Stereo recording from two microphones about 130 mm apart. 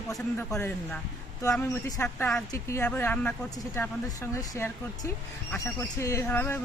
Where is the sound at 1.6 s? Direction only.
20° left (ahead or behind).